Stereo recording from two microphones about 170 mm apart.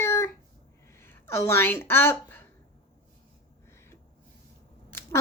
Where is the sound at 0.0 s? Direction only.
15° left (ahead or behind).